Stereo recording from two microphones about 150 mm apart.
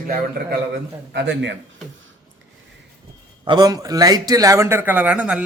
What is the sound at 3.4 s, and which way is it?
A man's voice, 30° right (ahead or behind).